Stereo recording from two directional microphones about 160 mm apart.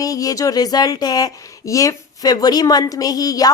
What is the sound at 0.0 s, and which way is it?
A woman's voice, 20° left (ahead or behind).